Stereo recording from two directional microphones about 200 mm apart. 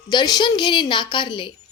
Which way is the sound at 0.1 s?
20° left (ahead or behind).